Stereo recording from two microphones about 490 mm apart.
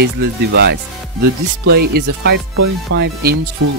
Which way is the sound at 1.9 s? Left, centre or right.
Centre.